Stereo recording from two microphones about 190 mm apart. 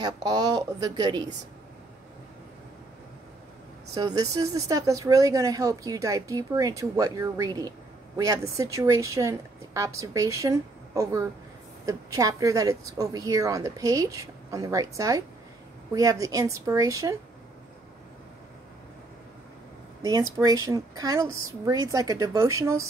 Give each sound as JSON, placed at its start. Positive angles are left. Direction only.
{"t": 0.0, "sound": "a woman's voice", "side_deg": -20}
{"t": 3.9, "sound": "speech", "side_deg": -20}
{"t": 20.0, "sound": "speech", "side_deg": -20}